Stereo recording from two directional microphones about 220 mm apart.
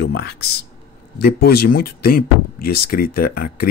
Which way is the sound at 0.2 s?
45° left (ahead or behind).